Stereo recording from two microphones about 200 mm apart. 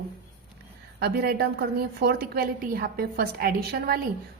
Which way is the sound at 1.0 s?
50° right (ahead or behind).